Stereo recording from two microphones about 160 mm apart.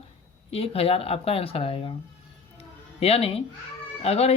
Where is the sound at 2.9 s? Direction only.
40° left (ahead or behind).